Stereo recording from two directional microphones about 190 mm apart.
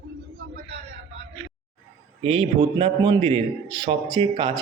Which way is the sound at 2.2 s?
30° right (ahead or behind).